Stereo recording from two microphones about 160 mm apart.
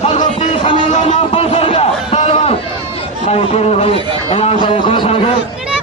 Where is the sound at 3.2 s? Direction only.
40° left (ahead or behind).